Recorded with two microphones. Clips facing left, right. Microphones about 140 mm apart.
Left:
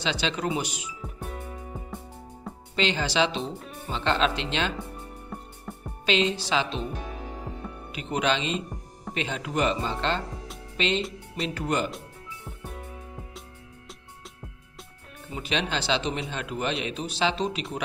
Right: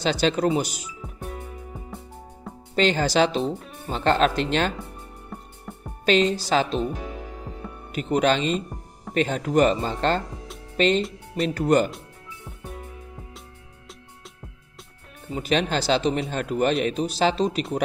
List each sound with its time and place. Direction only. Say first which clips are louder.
0.0 s speech: right 7 dB; 45° right (ahead or behind)
2.7 s speech: right 6 dB; 45° right (ahead or behind)
5.7 s music: even; centre (ahead or behind)
6.0 s speech: right 5 dB; 45° right (ahead or behind)
7.9 s speech: right 6 dB; 40° right (ahead or behind)
15.2 s speech: right 6 dB; 40° right (ahead or behind)